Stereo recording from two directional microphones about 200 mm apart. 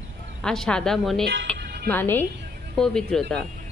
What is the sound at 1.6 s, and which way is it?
Music, 55° right (ahead or behind).